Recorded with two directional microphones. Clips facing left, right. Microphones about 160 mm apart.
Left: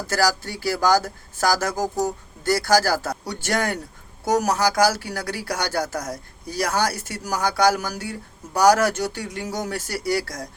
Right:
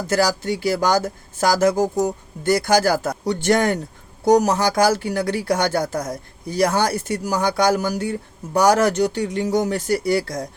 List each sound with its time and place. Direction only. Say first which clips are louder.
0.1 s speech: right 3 dB; 20° right (ahead or behind)